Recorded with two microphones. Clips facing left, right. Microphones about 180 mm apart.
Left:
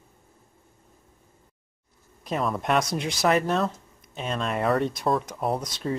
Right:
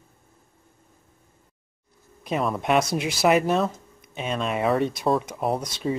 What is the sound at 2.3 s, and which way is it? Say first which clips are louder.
Speech: right 2 dB; 5° right (ahead or behind).